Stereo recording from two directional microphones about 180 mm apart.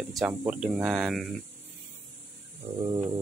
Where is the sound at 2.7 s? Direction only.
20° right (ahead or behind).